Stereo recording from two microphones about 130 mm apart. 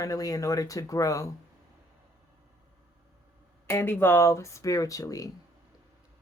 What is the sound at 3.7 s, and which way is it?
Speech, 15° left (ahead or behind).